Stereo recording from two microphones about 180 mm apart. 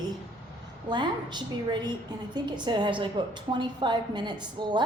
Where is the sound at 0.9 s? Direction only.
25° right (ahead or behind).